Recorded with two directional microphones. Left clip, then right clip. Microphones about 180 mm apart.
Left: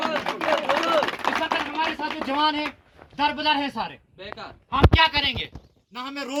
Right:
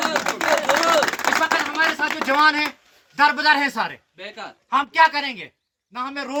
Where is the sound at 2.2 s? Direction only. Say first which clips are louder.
Right 6 dB; centre (ahead or behind).